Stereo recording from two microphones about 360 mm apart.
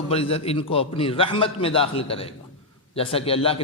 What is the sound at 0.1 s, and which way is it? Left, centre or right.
A man's voice, centre.